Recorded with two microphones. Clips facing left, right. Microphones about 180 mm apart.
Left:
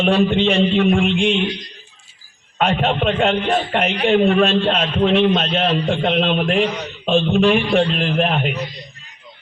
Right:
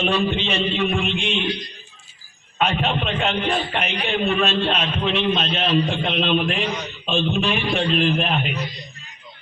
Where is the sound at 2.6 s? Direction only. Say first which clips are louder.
Left 4 dB; 55° left (ahead or behind).